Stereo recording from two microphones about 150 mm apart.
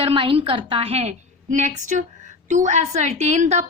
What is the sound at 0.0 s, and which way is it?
A woman's voice, 35° right (ahead or behind).